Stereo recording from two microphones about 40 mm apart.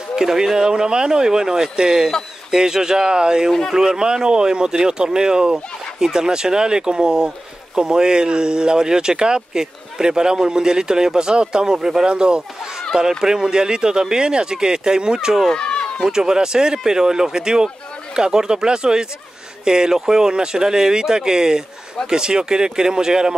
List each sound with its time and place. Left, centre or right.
0.1 s speech: centre
15.5 s run: left
16.1 s speech: centre